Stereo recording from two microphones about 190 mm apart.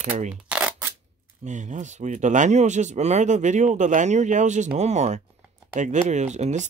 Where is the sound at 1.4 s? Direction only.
40° right (ahead or behind).